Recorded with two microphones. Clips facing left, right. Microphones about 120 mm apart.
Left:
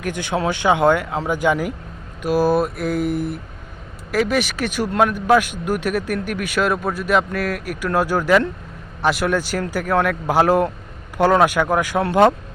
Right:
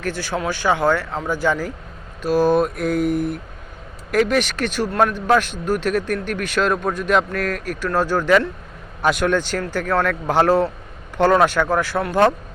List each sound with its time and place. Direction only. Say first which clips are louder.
0.0 s a man's voice: left 2 dB; 20° left (ahead or behind)
2.2 s mantra: right 1 dB; 10° left (ahead or behind)
4.1 s a man's voice: right 1 dB; 5° left (ahead or behind)